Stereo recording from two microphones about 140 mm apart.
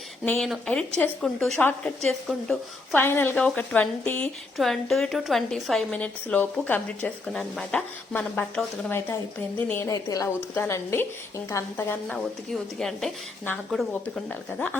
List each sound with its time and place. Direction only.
0.3 s a woman's voice: centre (ahead or behind)
2.9 s speech: 15° left (ahead or behind)
4.5 s a woman's voice: centre (ahead or behind)
9.9 s a woman's voice: 25° left (ahead or behind); by 13.1 s centre (ahead or behind)